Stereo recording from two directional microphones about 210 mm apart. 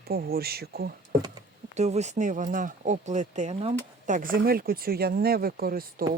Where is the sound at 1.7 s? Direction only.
30° right (ahead or behind).